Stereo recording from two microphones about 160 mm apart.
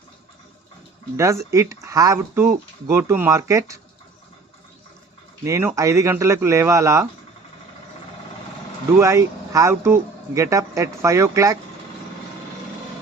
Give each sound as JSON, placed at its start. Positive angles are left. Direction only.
{"t": 1.1, "sound": "speech", "side_deg": -20}
{"t": 5.5, "sound": "speech", "side_deg": -20}
{"t": 9.0, "sound": "speech", "side_deg": -20}